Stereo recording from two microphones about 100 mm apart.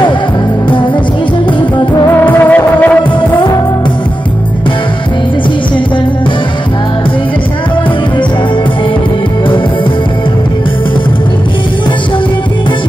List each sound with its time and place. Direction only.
2.1 s music: 20° left (ahead or behind)